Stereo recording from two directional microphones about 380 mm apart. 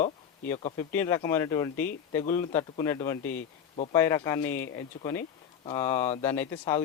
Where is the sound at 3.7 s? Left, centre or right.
Centre.